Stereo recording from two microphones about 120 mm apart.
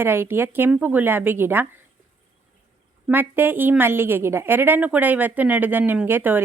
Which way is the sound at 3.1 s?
15° right (ahead or behind).